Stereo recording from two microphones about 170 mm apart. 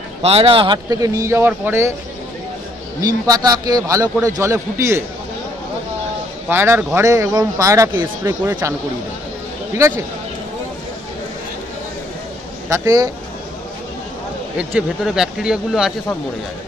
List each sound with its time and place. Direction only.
0.2 s speech: 35° right (ahead or behind); by 2.0 s 15° right (ahead or behind)
3.0 s speech: 25° right (ahead or behind)
6.5 s speech: 15° right (ahead or behind)
9.8 s speech: 15° right (ahead or behind)
12.6 s speech: 20° right (ahead or behind)
14.6 s speech: 5° right (ahead or behind)